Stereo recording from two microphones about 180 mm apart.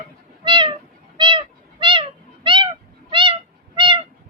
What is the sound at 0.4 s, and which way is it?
Cat, 25° right (ahead or behind).